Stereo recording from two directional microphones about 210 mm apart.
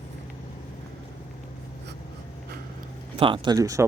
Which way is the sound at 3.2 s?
25° right (ahead or behind).